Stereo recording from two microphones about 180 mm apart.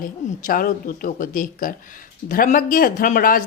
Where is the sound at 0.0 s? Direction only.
50° left (ahead or behind).